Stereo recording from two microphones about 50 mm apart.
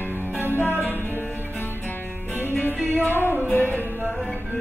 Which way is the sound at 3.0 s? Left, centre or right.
Left.